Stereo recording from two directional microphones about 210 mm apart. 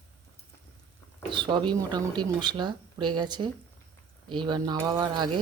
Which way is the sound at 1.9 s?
20° right (ahead or behind).